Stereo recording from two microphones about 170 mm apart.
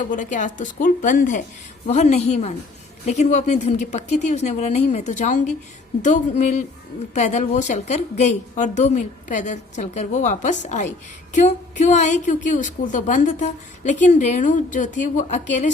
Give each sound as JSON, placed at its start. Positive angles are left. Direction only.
{"t": 0.0, "sound": "a woman's voice", "side_deg": 50}